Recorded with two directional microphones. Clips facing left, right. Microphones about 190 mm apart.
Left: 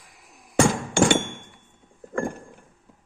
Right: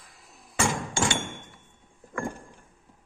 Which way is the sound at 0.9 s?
65° left (ahead or behind).